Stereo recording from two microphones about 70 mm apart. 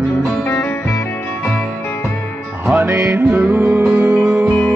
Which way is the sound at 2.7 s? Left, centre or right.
Right.